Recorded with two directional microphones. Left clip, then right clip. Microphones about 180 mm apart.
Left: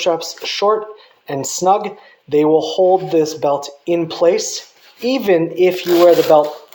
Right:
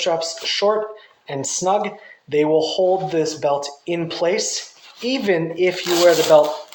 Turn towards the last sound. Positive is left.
turn(degrees=30)  # may be behind; listen again after turning